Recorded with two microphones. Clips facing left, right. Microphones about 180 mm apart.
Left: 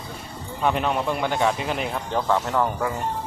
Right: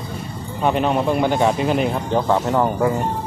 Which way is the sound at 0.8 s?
35° right (ahead or behind).